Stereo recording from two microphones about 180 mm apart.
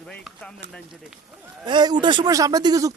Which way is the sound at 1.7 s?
25° right (ahead or behind).